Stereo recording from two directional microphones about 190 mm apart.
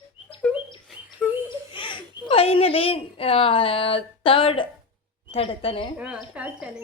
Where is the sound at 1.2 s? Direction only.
10° left (ahead or behind).